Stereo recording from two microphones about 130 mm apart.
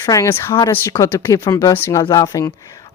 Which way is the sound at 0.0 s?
25° left (ahead or behind).